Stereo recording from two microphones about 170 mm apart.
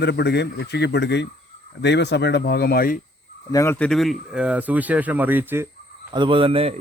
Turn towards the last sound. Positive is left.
turn(degrees=-35)  # may be behind; listen again after turning